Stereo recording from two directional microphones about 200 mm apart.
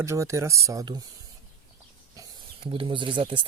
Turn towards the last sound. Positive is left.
turn(degrees=-25)  # may be behind; listen again after turning